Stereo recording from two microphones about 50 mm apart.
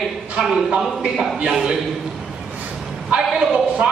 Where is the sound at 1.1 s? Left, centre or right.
Centre.